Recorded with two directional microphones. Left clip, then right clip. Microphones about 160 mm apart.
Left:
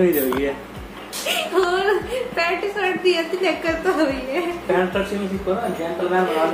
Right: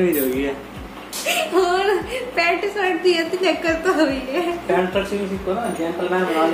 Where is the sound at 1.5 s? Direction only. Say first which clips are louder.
Even; 15° right (ahead or behind).